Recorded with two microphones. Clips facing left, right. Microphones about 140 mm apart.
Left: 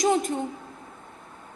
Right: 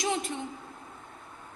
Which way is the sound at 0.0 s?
45° left (ahead or behind).